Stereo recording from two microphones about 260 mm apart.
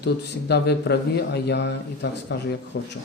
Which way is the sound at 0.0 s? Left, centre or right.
Left.